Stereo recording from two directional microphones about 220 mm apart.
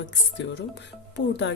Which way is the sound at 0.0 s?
55° left (ahead or behind).